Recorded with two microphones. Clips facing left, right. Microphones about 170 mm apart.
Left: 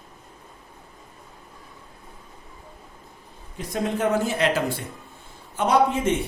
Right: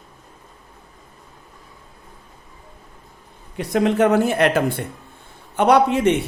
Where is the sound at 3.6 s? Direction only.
70° right (ahead or behind).